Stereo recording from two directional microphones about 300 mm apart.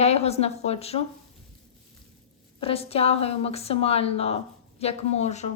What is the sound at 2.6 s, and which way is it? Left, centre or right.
A woman's voice, centre.